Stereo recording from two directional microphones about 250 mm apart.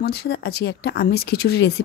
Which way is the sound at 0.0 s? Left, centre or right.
Left.